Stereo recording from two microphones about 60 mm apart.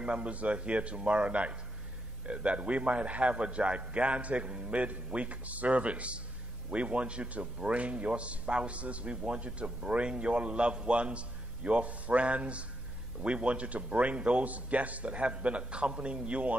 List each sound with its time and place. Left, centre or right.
0.0 s a man's voice: right